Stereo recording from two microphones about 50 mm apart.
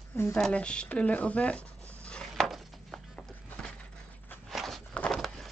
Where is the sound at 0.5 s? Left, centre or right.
Left.